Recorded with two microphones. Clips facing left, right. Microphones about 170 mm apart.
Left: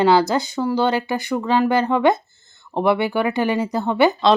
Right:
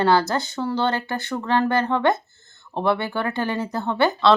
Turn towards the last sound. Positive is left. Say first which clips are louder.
# left 2 dB
turn(degrees=15)  # may be behind; listen again after turning